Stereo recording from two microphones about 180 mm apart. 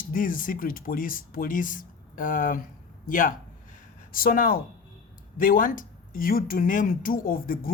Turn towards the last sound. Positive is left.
turn(degrees=50)  # may be behind; listen again after turning